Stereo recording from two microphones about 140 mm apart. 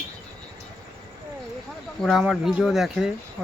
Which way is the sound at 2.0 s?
5° right (ahead or behind).